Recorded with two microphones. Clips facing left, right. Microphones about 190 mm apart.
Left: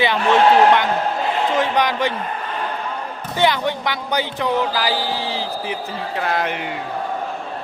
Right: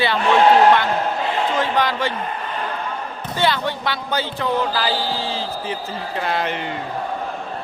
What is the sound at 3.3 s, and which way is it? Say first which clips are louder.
Speech: left 2 dB; 15° left (ahead or behind).